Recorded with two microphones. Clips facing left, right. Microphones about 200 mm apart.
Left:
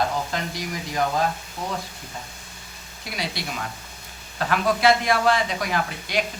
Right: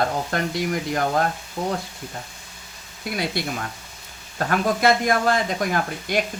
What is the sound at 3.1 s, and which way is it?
Speech, 55° right (ahead or behind).